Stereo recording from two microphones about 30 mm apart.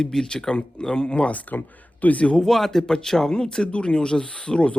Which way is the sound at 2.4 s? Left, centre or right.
Centre.